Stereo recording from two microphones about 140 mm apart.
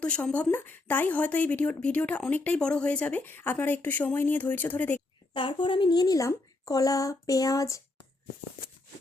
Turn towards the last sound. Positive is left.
turn(degrees=25)  # may be behind; listen again after turning